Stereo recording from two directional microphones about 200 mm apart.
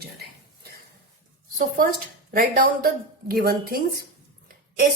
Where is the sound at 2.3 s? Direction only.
45° right (ahead or behind).